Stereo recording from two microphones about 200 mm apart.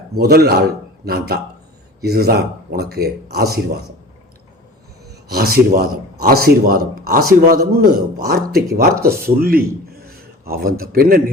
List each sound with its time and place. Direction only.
0.2 s a man's voice: 50° right (ahead or behind)
5.0 s a man's voice: 50° right (ahead or behind)